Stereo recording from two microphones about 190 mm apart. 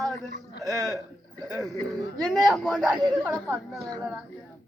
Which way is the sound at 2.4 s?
Centre (ahead or behind).